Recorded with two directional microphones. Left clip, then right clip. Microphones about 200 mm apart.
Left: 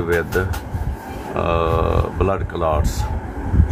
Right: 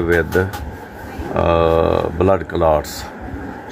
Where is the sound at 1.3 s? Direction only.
25° right (ahead or behind).